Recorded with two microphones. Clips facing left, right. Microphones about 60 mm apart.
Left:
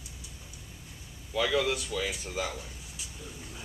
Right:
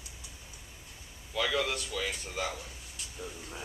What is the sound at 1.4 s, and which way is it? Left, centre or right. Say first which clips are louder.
Speech: left 3 dB; centre.